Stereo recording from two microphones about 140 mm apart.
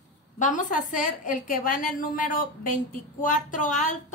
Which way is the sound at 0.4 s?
65° left (ahead or behind).